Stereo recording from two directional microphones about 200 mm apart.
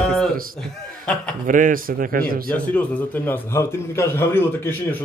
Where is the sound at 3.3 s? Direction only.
10° left (ahead or behind).